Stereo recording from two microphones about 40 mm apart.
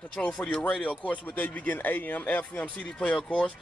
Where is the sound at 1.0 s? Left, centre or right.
Left.